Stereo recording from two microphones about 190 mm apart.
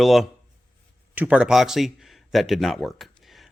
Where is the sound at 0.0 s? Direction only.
Centre (ahead or behind).